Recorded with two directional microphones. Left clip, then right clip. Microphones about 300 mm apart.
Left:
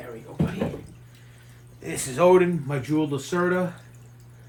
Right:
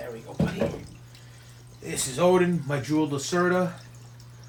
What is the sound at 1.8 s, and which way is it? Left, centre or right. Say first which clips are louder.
Speech: left 3 dB; centre.